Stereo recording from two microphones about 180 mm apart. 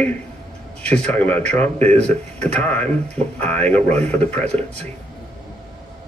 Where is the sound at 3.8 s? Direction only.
35° right (ahead or behind).